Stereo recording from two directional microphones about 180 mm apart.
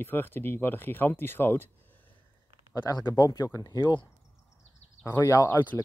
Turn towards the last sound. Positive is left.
turn(degrees=20)  # may be behind; listen again after turning